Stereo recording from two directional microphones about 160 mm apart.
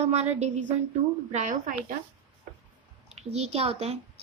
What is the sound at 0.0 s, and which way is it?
Speech, 40° right (ahead or behind).